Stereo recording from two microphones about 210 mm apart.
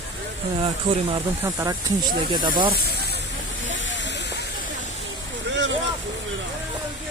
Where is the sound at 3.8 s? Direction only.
60° left (ahead or behind).